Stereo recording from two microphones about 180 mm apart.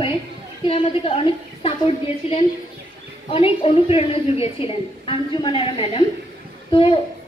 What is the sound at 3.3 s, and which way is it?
A child's voice, 30° left (ahead or behind).